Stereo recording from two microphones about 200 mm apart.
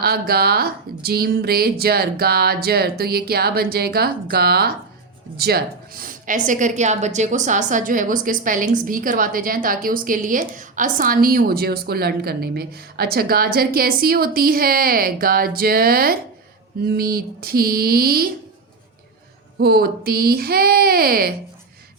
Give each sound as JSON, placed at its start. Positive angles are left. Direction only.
{"t": 0.0, "sound": "a woman's voice", "side_deg": -50}
{"t": 19.5, "sound": "a woman's voice", "side_deg": -50}